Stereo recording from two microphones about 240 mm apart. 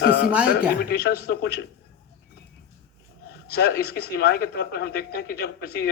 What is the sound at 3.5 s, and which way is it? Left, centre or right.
Speech, left.